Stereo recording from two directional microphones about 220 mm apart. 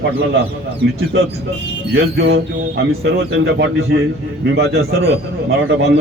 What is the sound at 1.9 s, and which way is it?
Speech, 50° right (ahead or behind).